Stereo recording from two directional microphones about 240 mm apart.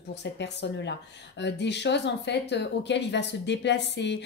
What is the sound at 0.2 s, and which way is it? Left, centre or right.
Speech, left.